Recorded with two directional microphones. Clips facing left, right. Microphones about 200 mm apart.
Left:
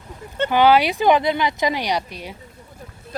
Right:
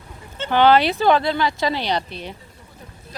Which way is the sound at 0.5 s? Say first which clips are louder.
Right 1 dB; 10° left (ahead or behind).